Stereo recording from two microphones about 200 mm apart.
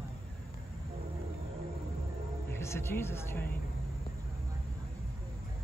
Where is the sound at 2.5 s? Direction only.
15° left (ahead or behind).